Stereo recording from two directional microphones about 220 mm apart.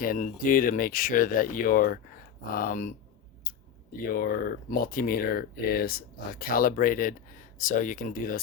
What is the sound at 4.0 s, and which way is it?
Speech, 40° left (ahead or behind).